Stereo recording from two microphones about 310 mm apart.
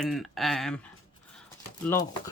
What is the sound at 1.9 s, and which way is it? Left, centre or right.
Speech, centre.